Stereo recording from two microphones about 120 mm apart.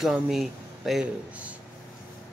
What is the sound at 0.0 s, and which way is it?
Speech, 5° right (ahead or behind).